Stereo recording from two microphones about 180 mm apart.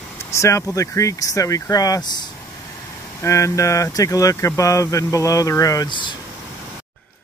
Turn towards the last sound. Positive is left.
turn(degrees=25)  # may be behind; listen again after turning